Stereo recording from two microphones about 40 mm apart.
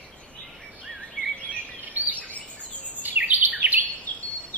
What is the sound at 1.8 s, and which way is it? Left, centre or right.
Bird vocalization, right.